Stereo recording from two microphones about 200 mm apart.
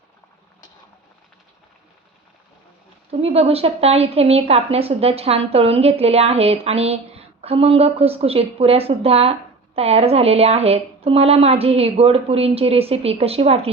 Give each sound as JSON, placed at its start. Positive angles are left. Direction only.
{"t": 3.1, "sound": "a woman's voice", "side_deg": -30}